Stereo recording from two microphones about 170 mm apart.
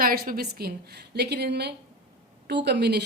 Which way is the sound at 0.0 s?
60° right (ahead or behind).